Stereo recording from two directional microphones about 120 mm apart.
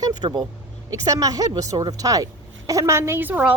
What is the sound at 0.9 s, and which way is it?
Speech, 30° right (ahead or behind).